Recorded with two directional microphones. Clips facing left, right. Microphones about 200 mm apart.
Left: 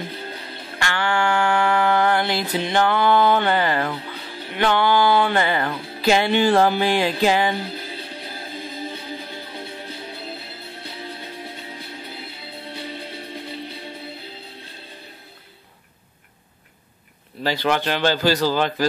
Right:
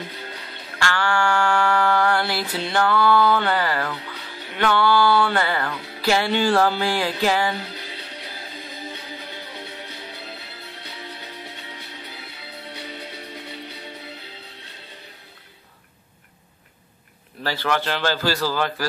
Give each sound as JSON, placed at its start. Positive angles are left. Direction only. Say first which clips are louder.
{"t": 0.2, "sound": "music", "louder": "left 3 dB", "side_deg": 30}
{"t": 4.6, "sound": "a man's voice", "louder": "left 1 dB", "side_deg": 15}
{"t": 5.9, "sound": "music", "louder": "left 3 dB", "side_deg": 20}
{"t": 8.7, "sound": "music", "louder": "left 3 dB", "side_deg": 30}
{"t": 17.4, "sound": "a man's voice", "louder": "left 3 dB", "side_deg": 15}